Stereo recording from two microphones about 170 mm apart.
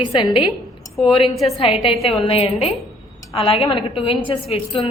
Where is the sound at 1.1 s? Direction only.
30° left (ahead or behind).